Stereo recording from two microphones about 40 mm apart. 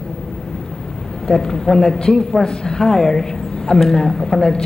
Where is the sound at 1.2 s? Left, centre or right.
Centre.